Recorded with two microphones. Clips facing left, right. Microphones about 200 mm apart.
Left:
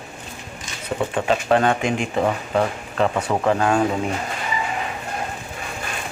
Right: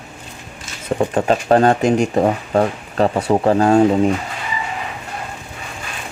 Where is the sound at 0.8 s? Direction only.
40° right (ahead or behind).